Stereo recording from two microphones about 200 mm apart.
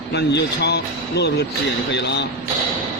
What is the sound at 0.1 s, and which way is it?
Speech, 55° left (ahead or behind).